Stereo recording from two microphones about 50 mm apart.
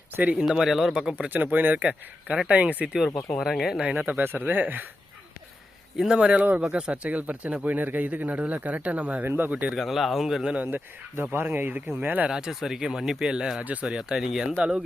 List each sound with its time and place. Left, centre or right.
0.3 s speech: centre
1.3 s speech: right
3.3 s a man's voice: centre
3.9 s speech: right
4.2 s speech: right
6.0 s speech: centre
6.3 s speech: right
9.2 s speech: right
9.5 s speech: right
9.7 s a man's voice: centre
10.6 s speech: right
12.3 s speech: centre